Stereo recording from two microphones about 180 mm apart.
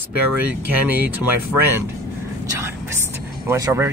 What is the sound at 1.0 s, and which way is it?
Speech, 10° right (ahead or behind).